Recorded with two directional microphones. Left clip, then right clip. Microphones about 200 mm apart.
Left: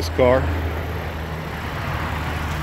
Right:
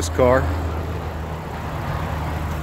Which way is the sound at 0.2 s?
5° right (ahead or behind).